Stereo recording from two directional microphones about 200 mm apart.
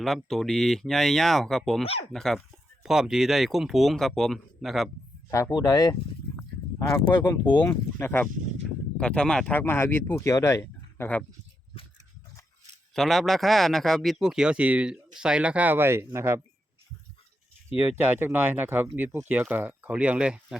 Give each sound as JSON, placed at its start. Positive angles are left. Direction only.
{"t": 0.0, "sound": "speech", "side_deg": 0}
{"t": 1.8, "sound": "speech", "side_deg": 30}
{"t": 2.1, "sound": "speech", "side_deg": 0}
{"t": 5.3, "sound": "a sound", "side_deg": 20}
{"t": 7.0, "sound": "speech", "side_deg": 20}
{"t": 12.9, "sound": "speech", "side_deg": 0}
{"t": 17.7, "sound": "speech", "side_deg": -5}